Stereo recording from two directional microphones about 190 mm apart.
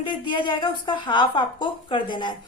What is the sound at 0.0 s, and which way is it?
Speech, 25° left (ahead or behind).